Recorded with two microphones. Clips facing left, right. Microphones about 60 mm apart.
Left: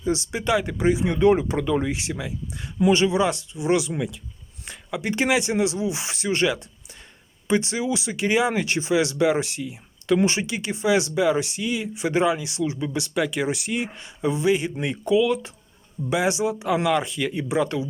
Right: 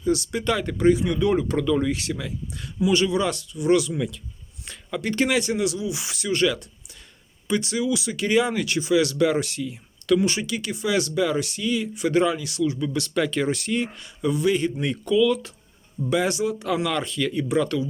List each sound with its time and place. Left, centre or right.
0.0 s speech: left
1.0 s speech: left
8.6 s speech: left
13.1 s speech: centre